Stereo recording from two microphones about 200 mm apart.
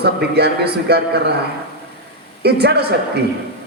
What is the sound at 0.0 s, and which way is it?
A man's voice, 55° right (ahead or behind).